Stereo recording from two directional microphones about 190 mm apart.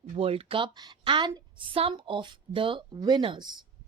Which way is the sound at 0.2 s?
30° right (ahead or behind).